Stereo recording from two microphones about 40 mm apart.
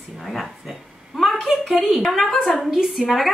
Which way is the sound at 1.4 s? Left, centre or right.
Centre.